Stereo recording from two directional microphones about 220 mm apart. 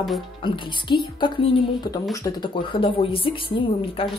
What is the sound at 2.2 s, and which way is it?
Speech, 20° left (ahead or behind).